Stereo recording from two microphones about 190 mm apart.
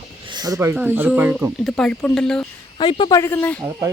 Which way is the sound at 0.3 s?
20° right (ahead or behind).